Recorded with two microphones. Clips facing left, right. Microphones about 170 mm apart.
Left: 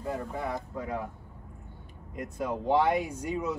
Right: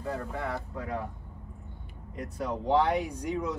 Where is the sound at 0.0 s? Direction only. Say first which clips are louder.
Left 1 dB; 15° left (ahead or behind).